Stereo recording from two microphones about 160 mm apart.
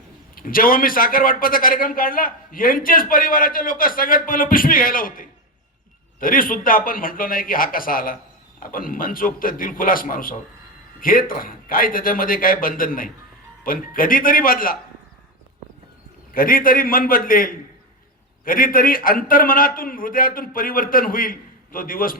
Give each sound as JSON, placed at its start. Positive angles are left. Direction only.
{"t": 0.3, "sound": "a man's voice", "side_deg": 60}
{"t": 16.3, "sound": "a man's voice", "side_deg": 65}